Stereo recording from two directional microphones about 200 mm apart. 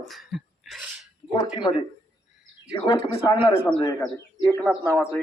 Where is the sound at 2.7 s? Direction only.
25° left (ahead or behind).